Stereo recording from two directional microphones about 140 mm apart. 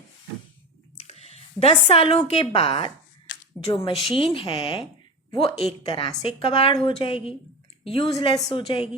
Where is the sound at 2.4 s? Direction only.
40° left (ahead or behind).